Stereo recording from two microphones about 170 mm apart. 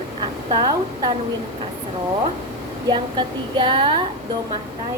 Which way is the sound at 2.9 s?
30° right (ahead or behind).